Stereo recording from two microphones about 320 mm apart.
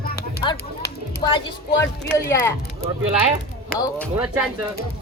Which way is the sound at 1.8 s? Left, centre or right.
Centre.